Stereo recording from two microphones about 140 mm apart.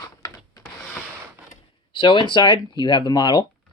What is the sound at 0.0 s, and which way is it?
Rub, 25° left (ahead or behind).